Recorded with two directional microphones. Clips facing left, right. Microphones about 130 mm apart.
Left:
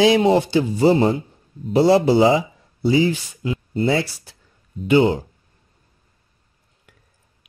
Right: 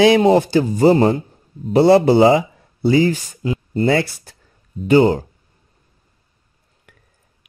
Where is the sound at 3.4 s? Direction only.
40° right (ahead or behind).